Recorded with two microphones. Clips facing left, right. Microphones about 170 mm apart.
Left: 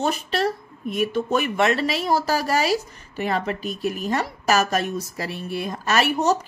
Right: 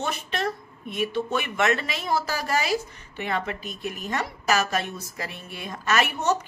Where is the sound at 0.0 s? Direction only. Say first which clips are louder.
Left 6 dB; 35° left (ahead or behind).